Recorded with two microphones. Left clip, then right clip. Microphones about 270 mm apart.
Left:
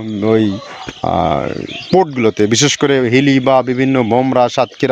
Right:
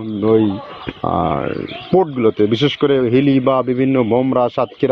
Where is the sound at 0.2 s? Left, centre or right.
Left.